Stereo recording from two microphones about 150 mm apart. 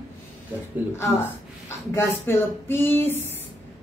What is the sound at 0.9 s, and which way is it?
A woman's voice, 15° left (ahead or behind).